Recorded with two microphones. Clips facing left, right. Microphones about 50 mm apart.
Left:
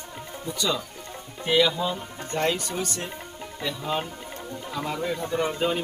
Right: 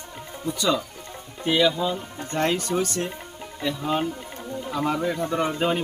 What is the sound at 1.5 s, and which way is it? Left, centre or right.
Speech, centre.